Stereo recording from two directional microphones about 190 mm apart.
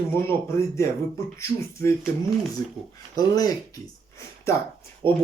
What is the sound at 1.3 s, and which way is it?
Speech, 15° left (ahead or behind).